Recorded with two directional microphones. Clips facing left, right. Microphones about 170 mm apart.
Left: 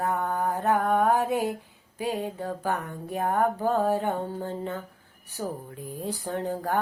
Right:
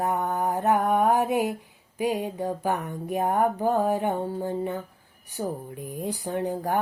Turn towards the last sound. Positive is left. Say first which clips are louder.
# right 2 dB
turn(degrees=-15)  # may be behind; listen again after turning